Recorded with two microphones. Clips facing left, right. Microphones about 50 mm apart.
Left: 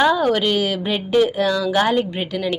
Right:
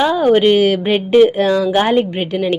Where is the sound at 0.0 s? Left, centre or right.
Centre.